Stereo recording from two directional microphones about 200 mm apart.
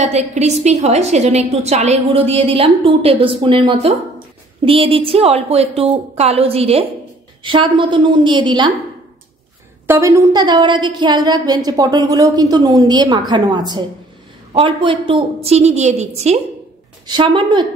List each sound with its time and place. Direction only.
0.0 s a woman's voice: 35° right (ahead or behind)
9.8 s a woman's voice: 15° right (ahead or behind)